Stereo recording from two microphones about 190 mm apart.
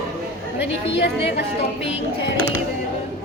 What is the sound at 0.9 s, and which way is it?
Speech, 65° left (ahead or behind).